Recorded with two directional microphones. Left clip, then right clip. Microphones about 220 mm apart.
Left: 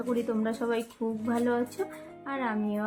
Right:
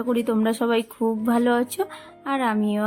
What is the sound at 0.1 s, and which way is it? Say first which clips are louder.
A woman's voice: right 7 dB; 50° right (ahead or behind).